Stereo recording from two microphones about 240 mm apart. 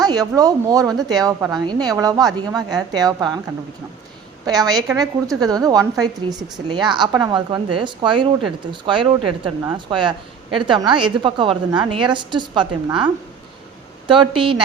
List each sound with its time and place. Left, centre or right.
0.0 s a woman's voice: centre
4.4 s a woman's voice: centre
14.1 s a woman's voice: right